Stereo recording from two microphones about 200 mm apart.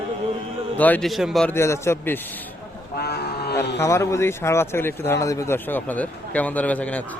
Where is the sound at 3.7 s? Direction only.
15° left (ahead or behind).